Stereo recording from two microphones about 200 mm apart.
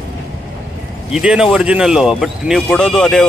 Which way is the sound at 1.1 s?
5° right (ahead or behind).